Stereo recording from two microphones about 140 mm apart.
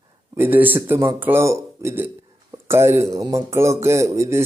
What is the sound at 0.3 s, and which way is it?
Speech, 15° right (ahead or behind).